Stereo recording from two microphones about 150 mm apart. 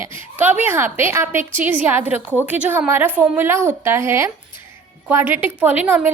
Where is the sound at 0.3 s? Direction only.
10° right (ahead or behind).